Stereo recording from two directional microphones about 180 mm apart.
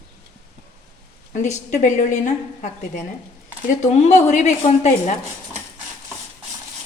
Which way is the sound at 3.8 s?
40° left (ahead or behind).